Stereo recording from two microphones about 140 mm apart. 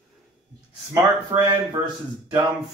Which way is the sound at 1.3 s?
30° right (ahead or behind).